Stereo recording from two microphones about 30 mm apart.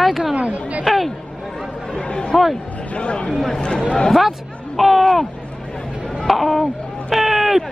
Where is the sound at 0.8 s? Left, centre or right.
Centre.